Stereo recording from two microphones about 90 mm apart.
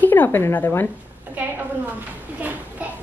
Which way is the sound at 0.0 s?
20° left (ahead or behind).